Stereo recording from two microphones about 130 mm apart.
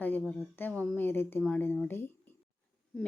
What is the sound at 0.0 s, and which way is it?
A woman's voice, 15° left (ahead or behind).